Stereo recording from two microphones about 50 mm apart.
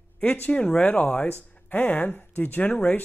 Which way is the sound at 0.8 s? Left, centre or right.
Left.